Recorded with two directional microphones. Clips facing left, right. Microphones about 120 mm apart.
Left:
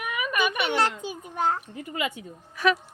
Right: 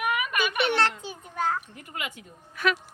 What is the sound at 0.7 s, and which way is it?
Speech, 15° left (ahead or behind).